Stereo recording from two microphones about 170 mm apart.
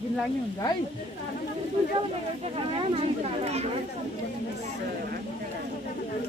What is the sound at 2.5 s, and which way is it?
Speech, 35° right (ahead or behind).